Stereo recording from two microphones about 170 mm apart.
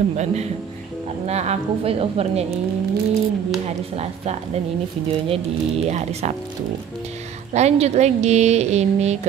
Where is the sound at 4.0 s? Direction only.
40° right (ahead or behind).